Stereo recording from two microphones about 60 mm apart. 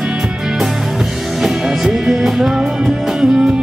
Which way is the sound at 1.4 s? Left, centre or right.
Centre.